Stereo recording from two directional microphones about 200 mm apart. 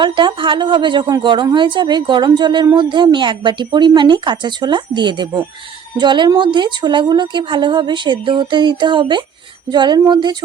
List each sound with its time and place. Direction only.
0.0 s a woman's voice: 25° right (ahead or behind)